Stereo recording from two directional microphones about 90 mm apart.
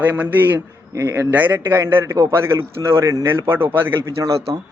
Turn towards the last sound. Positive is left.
turn(degrees=-40)  # may be behind; listen again after turning